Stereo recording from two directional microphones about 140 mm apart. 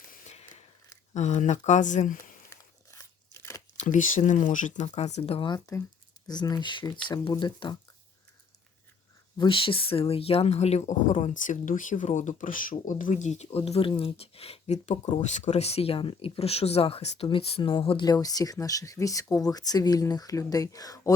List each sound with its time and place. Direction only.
1.1 s speech: 55° left (ahead or behind)
2.5 s crumpling: 20° left (ahead or behind)
3.8 s speech: 65° left (ahead or behind); by 7.8 s 35° left (ahead or behind)
9.4 s speech: 40° left (ahead or behind)